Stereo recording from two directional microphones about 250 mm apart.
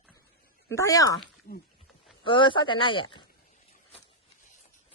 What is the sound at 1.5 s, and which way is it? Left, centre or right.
Speech, left.